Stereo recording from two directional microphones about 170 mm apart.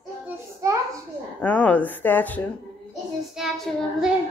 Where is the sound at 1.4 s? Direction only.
10° left (ahead or behind).